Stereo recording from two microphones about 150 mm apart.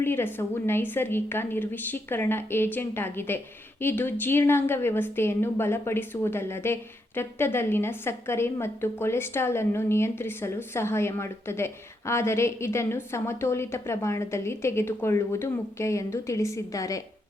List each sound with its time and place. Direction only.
0.0 s a woman's voice: 15° left (ahead or behind)